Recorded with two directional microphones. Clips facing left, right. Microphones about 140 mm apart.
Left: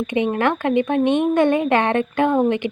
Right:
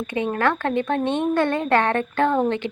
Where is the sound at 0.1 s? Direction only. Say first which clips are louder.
Left 2 dB; 20° left (ahead or behind).